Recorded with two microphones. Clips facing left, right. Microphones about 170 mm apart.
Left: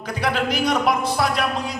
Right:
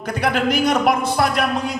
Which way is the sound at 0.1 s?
50° right (ahead or behind).